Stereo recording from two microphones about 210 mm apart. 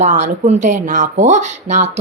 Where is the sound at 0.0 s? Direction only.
35° right (ahead or behind).